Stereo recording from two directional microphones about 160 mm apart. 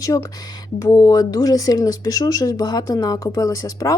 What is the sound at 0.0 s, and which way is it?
Speech, 20° left (ahead or behind).